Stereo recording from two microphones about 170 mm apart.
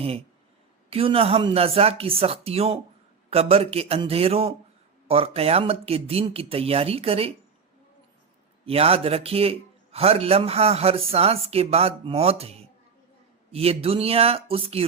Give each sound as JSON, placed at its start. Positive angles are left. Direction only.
{"t": 0.9, "sound": "a man's voice", "side_deg": -35}
{"t": 8.6, "sound": "a man's voice", "side_deg": -35}